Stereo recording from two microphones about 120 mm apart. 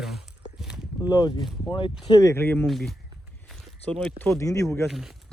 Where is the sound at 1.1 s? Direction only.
35° left (ahead or behind).